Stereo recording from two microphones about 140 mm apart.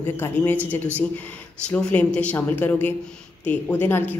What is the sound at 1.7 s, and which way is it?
A woman's voice, 10° left (ahead or behind).